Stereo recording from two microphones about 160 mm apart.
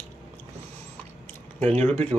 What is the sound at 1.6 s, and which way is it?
Speech, 10° left (ahead or behind).